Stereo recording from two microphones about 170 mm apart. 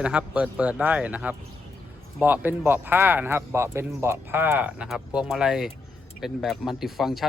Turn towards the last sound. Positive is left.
turn(degrees=0)  # may be behind; listen again after turning